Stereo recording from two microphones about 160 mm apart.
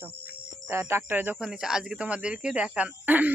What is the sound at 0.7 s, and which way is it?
Speech, 15° right (ahead or behind).